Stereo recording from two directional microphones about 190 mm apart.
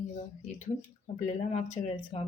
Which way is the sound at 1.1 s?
40° left (ahead or behind).